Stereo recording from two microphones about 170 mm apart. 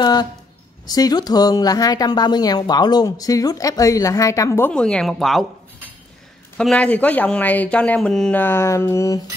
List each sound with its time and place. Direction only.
0.0 s speech: 25° left (ahead or behind); by 5.5 s centre (ahead or behind)
6.6 s speech: 5° left (ahead or behind)